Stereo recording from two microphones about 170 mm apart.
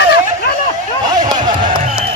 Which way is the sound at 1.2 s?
25° right (ahead or behind).